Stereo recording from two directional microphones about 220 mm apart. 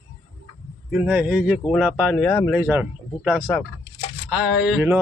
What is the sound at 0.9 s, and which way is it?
Speech, 10° right (ahead or behind).